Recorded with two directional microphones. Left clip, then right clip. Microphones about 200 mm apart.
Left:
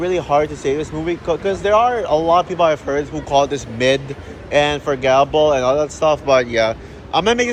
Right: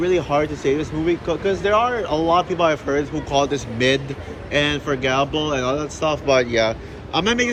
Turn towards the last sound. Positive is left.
turn(degrees=15)  # may be behind; listen again after turning